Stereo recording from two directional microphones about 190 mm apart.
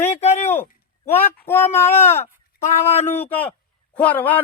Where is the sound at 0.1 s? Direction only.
35° left (ahead or behind).